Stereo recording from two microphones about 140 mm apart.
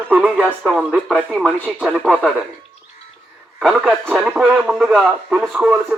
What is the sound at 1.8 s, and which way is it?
Speech, 10° right (ahead or behind).